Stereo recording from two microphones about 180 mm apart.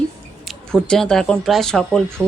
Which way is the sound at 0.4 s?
5° left (ahead or behind).